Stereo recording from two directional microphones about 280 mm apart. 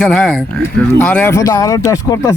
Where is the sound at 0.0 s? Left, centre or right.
Centre.